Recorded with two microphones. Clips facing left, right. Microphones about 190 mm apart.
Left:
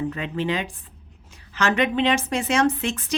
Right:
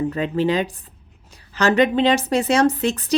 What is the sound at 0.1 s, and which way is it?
A woman's voice, 40° right (ahead or behind).